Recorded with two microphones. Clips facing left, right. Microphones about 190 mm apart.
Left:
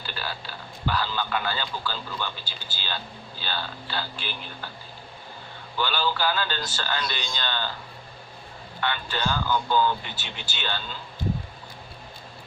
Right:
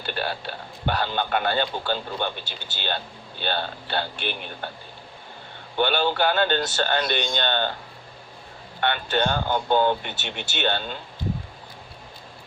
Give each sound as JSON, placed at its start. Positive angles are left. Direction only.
{"t": 0.0, "sound": "speech", "side_deg": -60}
{"t": 5.7, "sound": "speech", "side_deg": -60}
{"t": 8.8, "sound": "speech", "side_deg": -55}